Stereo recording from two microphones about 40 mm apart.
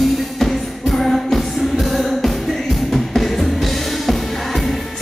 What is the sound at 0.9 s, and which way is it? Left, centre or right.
Music, centre.